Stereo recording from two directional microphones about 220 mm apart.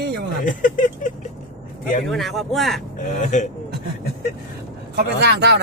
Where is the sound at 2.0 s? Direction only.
Centre (ahead or behind).